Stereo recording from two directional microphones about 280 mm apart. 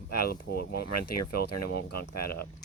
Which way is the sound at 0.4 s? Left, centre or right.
Left.